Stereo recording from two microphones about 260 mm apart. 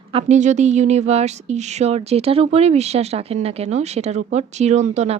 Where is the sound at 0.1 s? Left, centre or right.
Right.